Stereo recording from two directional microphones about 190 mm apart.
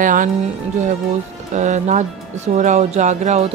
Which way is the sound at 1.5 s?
40° right (ahead or behind).